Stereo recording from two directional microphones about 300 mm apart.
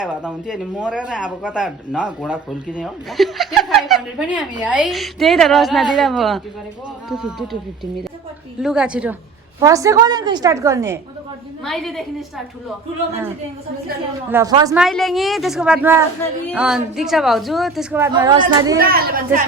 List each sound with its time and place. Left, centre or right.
0.0 s speech: centre
8.6 s a woman's voice: centre
11.6 s speech: centre
14.3 s a woman's voice: centre
14.8 s a woman's voice: centre
18.8 s a woman's voice: right